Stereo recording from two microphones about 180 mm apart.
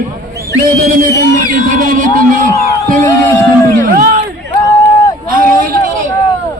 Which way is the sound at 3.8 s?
55° right (ahead or behind).